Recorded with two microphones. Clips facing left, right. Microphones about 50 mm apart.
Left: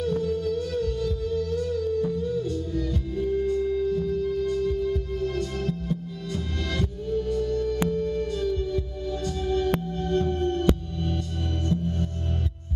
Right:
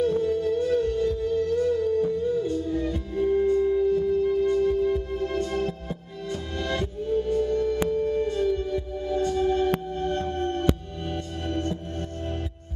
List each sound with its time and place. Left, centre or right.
0.0 s music: right